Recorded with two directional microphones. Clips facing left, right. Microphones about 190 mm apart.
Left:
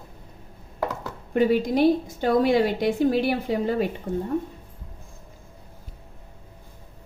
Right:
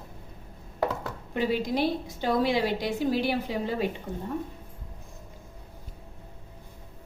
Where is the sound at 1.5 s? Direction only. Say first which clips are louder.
Left 6 dB; 50° left (ahead or behind).